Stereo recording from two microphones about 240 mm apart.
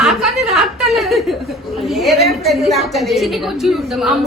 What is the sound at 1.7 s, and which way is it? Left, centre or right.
Speech, centre.